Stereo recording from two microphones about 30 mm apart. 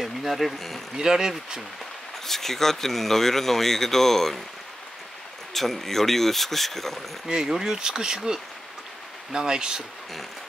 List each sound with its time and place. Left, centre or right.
0.0 s a sound: centre
0.5 s speech: centre
0.9 s speech: right
2.2 s speech: centre
5.5 s speech: centre
7.4 s speech: centre
9.3 s speech: right